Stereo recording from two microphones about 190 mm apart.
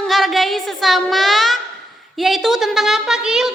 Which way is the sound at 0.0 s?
Centre (ahead or behind).